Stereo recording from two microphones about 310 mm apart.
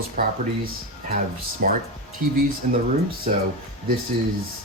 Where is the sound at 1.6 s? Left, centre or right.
Right.